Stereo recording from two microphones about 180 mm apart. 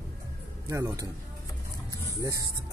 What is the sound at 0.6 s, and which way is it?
Speech, 20° right (ahead or behind).